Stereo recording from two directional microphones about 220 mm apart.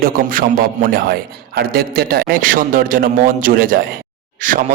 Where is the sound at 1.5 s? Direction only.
45° right (ahead or behind).